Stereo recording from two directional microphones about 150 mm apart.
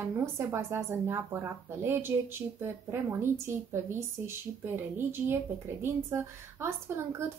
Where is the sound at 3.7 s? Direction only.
15° right (ahead or behind).